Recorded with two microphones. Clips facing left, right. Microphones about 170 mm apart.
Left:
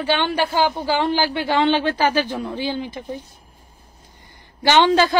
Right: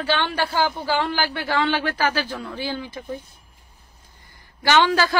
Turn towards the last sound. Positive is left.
turn(degrees=20)  # may be behind; listen again after turning